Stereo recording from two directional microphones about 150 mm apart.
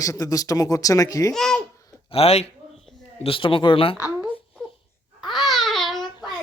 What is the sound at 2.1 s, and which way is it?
Speech, 45° left (ahead or behind).